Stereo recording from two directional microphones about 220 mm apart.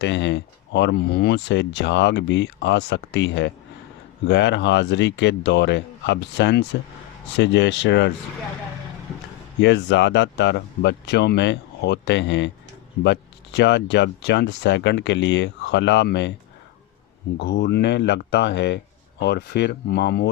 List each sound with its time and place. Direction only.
0.0 s speech: 55° left (ahead or behind)
9.6 s speech: 55° left (ahead or behind)
17.3 s speech: 50° left (ahead or behind)